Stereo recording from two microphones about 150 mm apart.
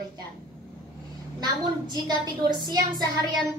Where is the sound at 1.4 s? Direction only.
25° right (ahead or behind).